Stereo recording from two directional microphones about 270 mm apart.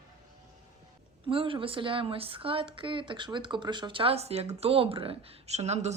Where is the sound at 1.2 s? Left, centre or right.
Centre.